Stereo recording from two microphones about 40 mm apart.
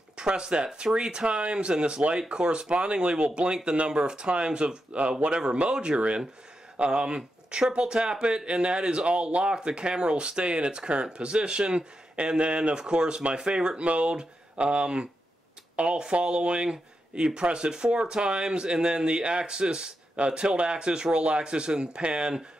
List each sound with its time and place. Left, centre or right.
0.2 s speech: right
13.7 s speech: right